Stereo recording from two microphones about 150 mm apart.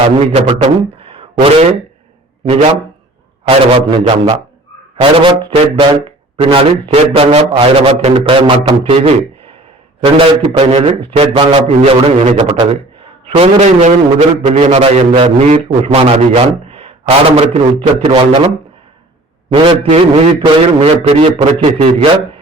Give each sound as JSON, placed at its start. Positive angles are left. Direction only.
{"t": 0.3, "sound": "a man's voice", "side_deg": -45}
{"t": 19.5, "sound": "speech", "side_deg": -35}